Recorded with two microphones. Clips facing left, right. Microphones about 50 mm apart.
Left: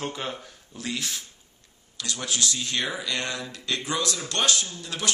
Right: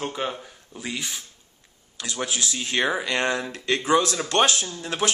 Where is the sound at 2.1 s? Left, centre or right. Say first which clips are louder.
Right 2 dB; centre.